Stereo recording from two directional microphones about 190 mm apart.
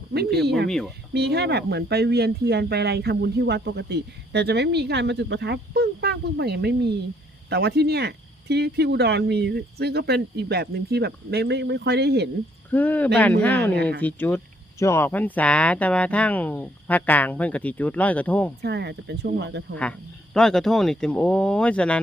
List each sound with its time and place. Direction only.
0.4 s speech: 60° right (ahead or behind)
0.7 s speech: 5° left (ahead or behind)
1.1 s speech: 60° right (ahead or behind)
12.7 s speech: 10° left (ahead or behind)
18.6 s speech: 60° right (ahead or behind)
19.7 s speech: 5° left (ahead or behind)